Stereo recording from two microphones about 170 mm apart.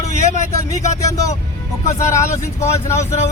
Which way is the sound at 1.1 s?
20° left (ahead or behind).